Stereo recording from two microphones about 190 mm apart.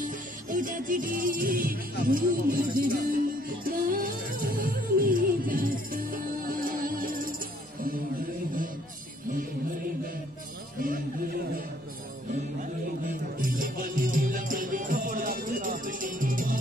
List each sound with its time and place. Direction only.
0.5 s music: 45° right (ahead or behind)
12.5 s music: 45° right (ahead or behind)